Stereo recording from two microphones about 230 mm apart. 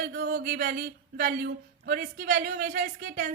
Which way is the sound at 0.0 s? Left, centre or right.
Right.